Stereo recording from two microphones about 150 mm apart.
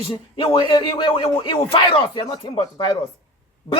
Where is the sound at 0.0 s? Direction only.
35° left (ahead or behind).